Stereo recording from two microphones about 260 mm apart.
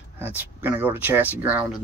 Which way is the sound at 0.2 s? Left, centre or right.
Centre.